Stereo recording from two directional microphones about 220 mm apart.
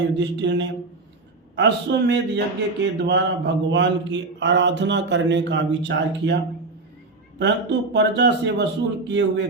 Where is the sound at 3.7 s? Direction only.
55° right (ahead or behind).